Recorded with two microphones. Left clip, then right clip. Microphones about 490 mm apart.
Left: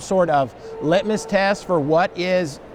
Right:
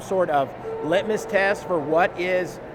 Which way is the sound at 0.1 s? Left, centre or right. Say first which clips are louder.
Left 4 dB; left.